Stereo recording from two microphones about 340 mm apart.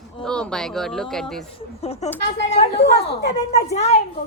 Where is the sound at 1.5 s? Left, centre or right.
Centre.